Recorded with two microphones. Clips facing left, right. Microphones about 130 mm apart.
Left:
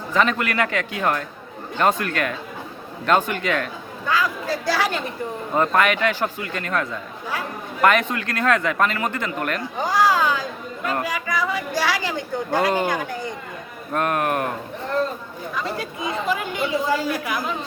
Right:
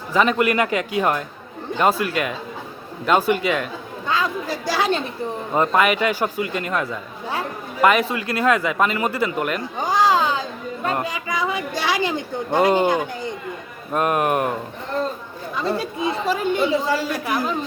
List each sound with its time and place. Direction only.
0.1 s speech: 10° right (ahead or behind)
4.0 s a woman's voice: 20° right (ahead or behind)
5.5 s a woman's voice: 10° right (ahead or behind)
15.5 s speech: 30° right (ahead or behind)